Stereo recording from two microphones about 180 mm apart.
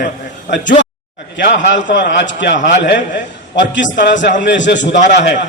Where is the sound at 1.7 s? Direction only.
85° left.